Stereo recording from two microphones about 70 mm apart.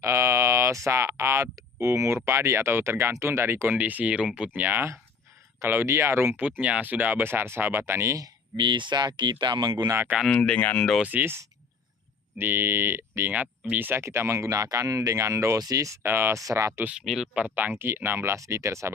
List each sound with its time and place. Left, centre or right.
0.0 s speech: right
3.8 s speech: right
4.5 s speech: right
6.6 s speech: centre; by 8.1 s right
8.5 s speech: right
10.3 s speech: centre
11.0 s speech: right
12.4 s speech: right
13.3 s speech: right
14.0 s speech: right
16.0 s speech: right
16.4 s speech: right
17.3 s speech: right
18.3 s speech: right